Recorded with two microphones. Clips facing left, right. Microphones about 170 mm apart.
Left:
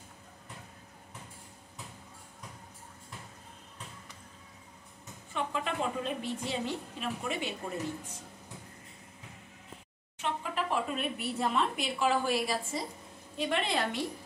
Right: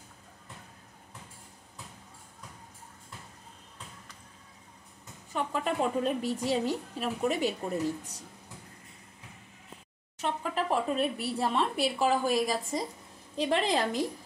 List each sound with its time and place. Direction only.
5.3 s speech: 40° right (ahead or behind)
10.1 s speech: 40° right (ahead or behind)